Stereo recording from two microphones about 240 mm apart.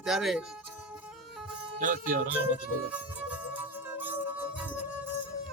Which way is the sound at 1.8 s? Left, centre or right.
Right.